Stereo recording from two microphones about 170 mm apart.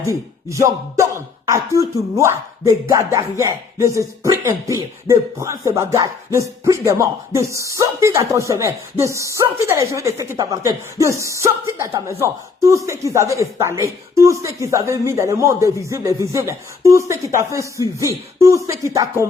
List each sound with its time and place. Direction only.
0.4 s rapping: 15° right (ahead or behind)